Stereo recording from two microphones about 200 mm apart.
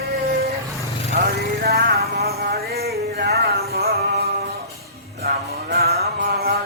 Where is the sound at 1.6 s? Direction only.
50° right (ahead or behind).